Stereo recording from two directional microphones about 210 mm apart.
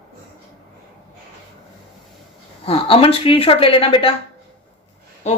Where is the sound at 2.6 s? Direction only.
25° left (ahead or behind).